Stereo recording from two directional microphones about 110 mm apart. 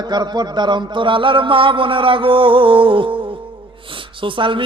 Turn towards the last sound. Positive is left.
turn(degrees=-50)  # may be behind; listen again after turning